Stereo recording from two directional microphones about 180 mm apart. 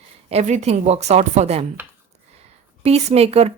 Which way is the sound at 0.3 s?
40° right (ahead or behind).